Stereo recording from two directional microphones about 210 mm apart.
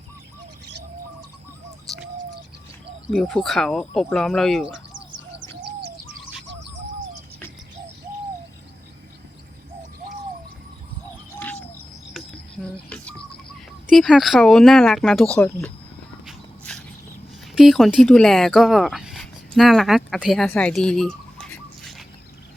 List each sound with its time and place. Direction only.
3.1 s speech: centre (ahead or behind)
11.3 s bird: 10° left (ahead or behind)
12.9 s bird: 5° left (ahead or behind)
13.8 s speech: centre (ahead or behind)
16.2 s a sound: centre (ahead or behind)
17.5 s speech: centre (ahead or behind)